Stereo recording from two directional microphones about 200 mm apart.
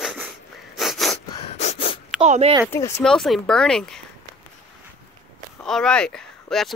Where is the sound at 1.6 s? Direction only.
30° left (ahead or behind).